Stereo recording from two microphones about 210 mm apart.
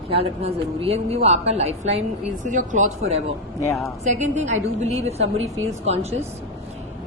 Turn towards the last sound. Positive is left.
turn(degrees=-30)  # may be behind; listen again after turning